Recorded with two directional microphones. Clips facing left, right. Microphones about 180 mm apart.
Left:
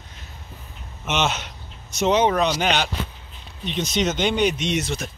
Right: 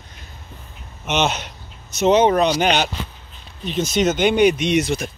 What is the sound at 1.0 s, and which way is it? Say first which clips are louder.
Speech: right 3 dB; centre (ahead or behind).